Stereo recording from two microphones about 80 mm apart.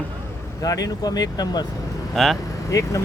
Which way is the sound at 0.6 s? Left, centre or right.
Left.